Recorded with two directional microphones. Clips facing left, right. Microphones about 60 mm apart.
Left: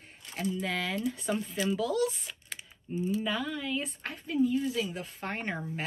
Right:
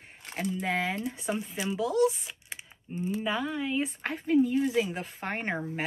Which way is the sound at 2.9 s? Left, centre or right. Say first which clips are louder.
Left 1 dB; right.